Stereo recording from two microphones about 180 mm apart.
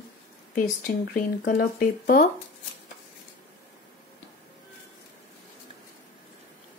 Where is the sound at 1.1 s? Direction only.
50° left (ahead or behind).